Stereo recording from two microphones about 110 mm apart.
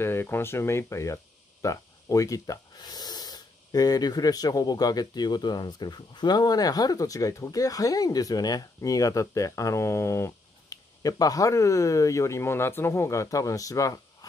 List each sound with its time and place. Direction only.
0.0 s speech: 20° left (ahead or behind)